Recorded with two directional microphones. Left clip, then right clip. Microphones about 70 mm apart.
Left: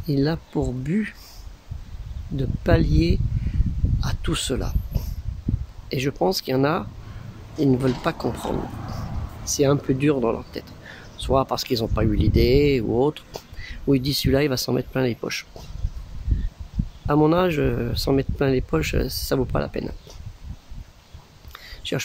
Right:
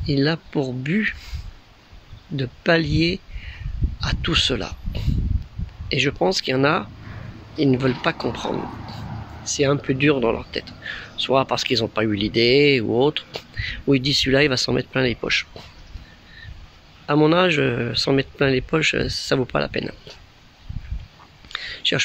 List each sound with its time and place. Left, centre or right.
0.0 s speech: centre
2.3 s speech: centre
5.9 s speech: centre
17.2 s speech: left
17.9 s speech: left
21.5 s whispering: centre